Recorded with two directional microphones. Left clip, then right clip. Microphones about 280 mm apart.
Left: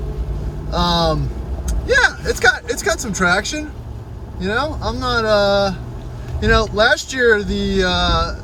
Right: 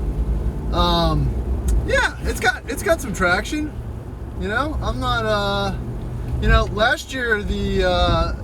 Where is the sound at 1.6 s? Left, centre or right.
Centre.